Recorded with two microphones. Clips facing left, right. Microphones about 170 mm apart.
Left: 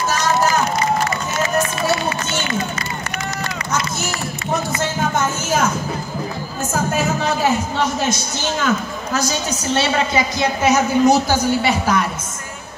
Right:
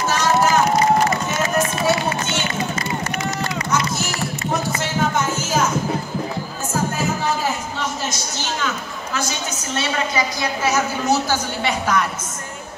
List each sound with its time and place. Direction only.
5.1 s music: 55° left (ahead or behind)
6.7 s music: 80° left
8.6 s a sound: 40° left (ahead or behind)
9.8 s a man's voice: 25° left (ahead or behind)